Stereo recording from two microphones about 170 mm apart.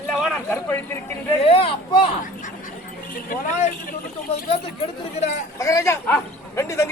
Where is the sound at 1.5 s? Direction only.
35° left (ahead or behind).